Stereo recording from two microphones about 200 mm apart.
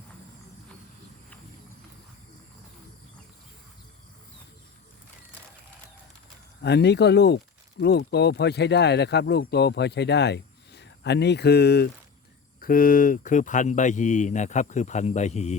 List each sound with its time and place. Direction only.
6.6 s speech: 60° left (ahead or behind); by 15.5 s 35° left (ahead or behind)